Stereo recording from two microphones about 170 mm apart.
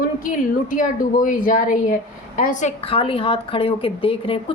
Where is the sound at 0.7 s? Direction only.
50° left (ahead or behind).